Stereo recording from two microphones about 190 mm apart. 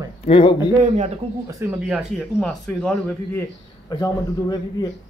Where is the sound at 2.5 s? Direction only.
5° left (ahead or behind).